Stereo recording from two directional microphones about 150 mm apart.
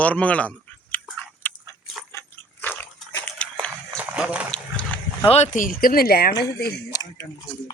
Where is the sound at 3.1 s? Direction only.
10° left (ahead or behind).